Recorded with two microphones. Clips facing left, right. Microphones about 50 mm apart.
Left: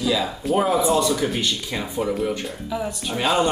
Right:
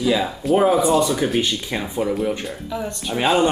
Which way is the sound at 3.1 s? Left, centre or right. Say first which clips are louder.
Right 3 dB; centre.